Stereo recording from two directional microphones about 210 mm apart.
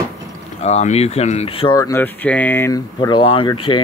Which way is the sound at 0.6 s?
30° left (ahead or behind).